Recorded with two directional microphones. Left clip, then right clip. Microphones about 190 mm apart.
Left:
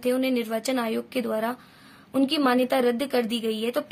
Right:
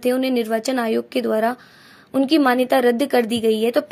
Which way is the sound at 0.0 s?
35° right (ahead or behind).